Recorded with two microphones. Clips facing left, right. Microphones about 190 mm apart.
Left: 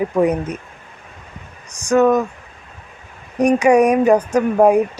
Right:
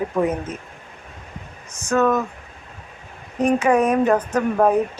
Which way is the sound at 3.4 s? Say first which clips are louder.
Left 5 dB; 15° left (ahead or behind).